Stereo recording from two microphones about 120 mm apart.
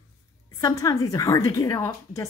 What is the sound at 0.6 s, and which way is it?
A woman's voice, 30° left (ahead or behind).